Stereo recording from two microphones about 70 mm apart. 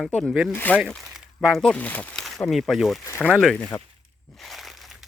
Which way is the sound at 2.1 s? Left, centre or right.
Centre.